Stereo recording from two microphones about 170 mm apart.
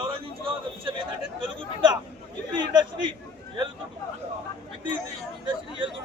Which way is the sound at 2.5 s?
25° right (ahead or behind).